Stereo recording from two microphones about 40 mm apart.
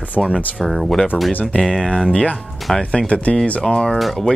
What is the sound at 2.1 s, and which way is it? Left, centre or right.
Speech, left.